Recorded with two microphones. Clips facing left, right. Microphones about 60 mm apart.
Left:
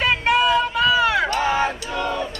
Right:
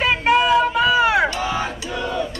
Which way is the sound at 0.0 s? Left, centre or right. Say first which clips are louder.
Right 1 dB; centre.